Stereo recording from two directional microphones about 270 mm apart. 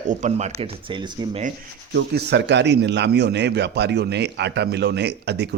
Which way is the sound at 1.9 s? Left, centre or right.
Right.